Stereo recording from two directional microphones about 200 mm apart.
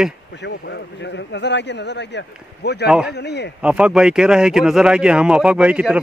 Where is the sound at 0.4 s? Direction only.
60° left (ahead or behind).